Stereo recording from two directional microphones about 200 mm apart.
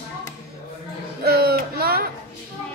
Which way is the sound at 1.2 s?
50° right (ahead or behind).